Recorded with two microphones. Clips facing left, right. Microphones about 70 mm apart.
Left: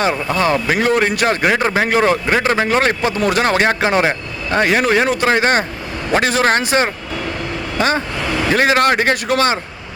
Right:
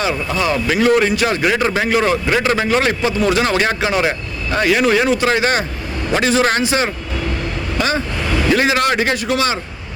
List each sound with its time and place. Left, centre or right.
0.3 s a man's voice: left